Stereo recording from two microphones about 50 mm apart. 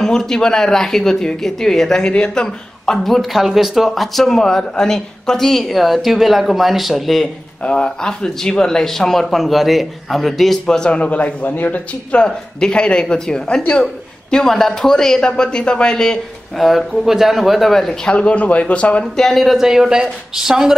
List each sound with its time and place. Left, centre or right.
0.0 s speech: centre
7.6 s speech: centre
10.8 s speech: left
11.5 s speech: left
12.3 s speech: centre
16.5 s speech: centre
18.0 s speech: left
19.1 s speech: centre